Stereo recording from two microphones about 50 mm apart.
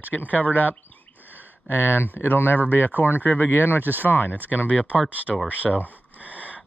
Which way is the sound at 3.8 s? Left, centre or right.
Right.